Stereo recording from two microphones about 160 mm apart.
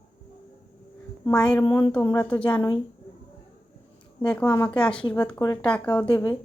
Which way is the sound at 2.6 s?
30° left (ahead or behind).